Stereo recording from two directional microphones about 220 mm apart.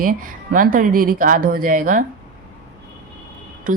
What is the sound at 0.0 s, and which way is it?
A woman's voice, 40° right (ahead or behind).